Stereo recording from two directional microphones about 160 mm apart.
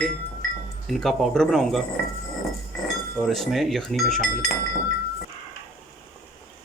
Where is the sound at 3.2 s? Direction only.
Centre (ahead or behind).